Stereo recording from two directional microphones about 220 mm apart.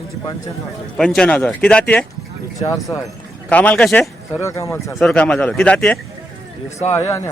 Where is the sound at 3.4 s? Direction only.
5° left (ahead or behind).